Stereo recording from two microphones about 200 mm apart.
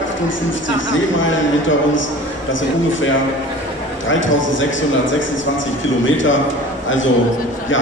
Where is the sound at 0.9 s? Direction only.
70° left (ahead or behind).